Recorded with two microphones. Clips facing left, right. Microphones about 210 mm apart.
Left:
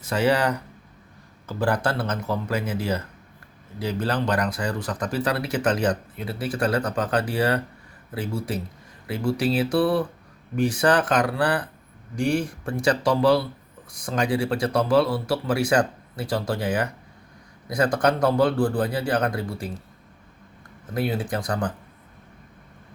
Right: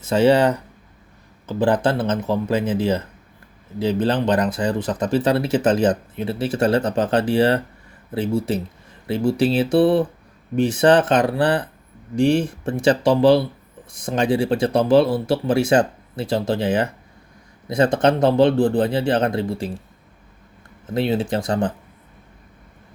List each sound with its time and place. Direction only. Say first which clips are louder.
0.0 s speech: right 6 dB; 25° right (ahead or behind)
20.9 s speech: right 5 dB; 25° right (ahead or behind)